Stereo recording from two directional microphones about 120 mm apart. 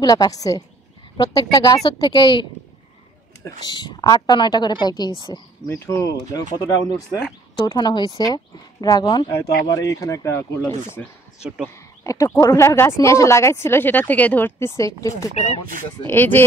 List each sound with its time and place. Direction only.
0.0 s a woman's voice: 30° left (ahead or behind)
3.6 s a woman's voice: 35° left (ahead or behind)
11.0 s speech: 10° left (ahead or behind)
12.0 s speech: 25° left (ahead or behind)
16.1 s speech: 15° left (ahead or behind)